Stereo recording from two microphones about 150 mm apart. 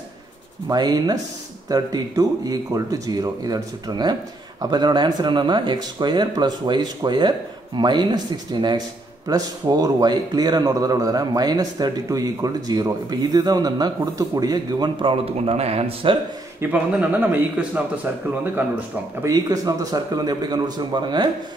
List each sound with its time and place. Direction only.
0.7 s speech: 25° right (ahead or behind)
16.7 s speech: 10° right (ahead or behind)
19.2 s speech: 25° right (ahead or behind)